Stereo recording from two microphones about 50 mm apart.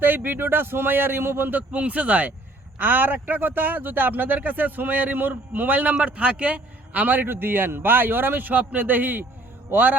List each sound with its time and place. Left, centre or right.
0.0 s a man's voice: right
2.7 s a man's voice: right
7.3 s a man's voice: right